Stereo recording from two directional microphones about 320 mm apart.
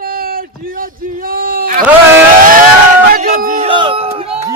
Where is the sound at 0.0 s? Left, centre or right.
Right.